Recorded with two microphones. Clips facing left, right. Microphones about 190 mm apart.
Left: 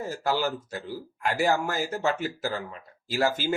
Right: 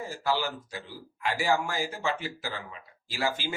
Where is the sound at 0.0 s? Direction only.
45° left (ahead or behind).